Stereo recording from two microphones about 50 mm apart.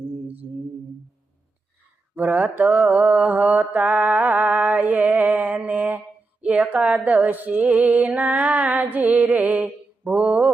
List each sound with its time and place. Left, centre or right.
2.1 s mantra: right
6.4 s a sound: right
10.0 s mantra: right